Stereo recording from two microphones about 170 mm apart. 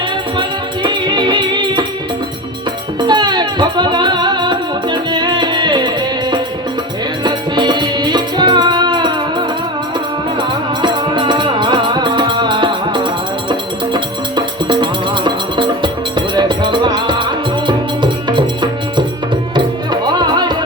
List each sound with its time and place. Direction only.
0.3 s music: 25° right (ahead or behind)
3.0 s music: 25° right (ahead or behind)
7.3 s music: 25° right (ahead or behind)
10.8 s music: 25° right (ahead or behind)